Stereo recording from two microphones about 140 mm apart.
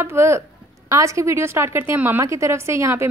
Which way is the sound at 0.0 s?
20° right (ahead or behind).